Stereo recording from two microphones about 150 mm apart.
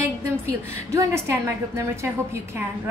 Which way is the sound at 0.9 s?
20° right (ahead or behind).